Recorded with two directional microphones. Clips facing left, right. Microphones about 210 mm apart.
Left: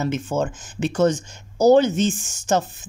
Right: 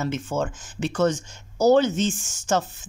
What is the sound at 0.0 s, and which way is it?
Speech, 15° left (ahead or behind).